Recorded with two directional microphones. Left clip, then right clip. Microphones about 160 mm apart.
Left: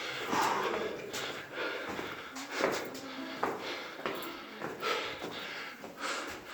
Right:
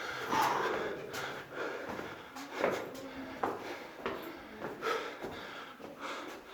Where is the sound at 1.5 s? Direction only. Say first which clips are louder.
Left 3 dB; 35° right (ahead or behind).